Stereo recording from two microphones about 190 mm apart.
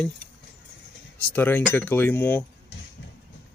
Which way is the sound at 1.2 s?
10° left (ahead or behind).